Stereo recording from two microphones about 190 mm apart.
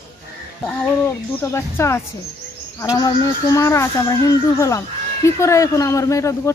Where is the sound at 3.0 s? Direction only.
20° left (ahead or behind).